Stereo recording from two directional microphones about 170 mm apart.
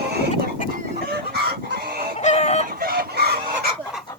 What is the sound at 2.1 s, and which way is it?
Synthetic singing, 40° left (ahead or behind).